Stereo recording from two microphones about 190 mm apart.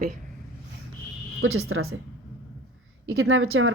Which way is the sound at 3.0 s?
90° right.